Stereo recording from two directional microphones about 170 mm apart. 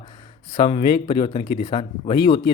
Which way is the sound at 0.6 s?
30° left (ahead or behind).